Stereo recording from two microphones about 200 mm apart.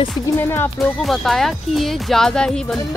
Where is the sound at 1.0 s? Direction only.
Centre (ahead or behind).